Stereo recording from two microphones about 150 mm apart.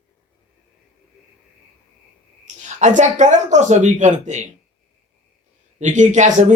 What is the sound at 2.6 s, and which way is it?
A woman's voice, 55° right (ahead or behind).